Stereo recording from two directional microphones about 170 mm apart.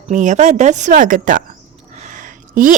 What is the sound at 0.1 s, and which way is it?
A woman's voice, 45° right (ahead or behind).